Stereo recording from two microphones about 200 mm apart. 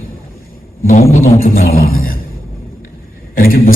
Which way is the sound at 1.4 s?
45° left (ahead or behind).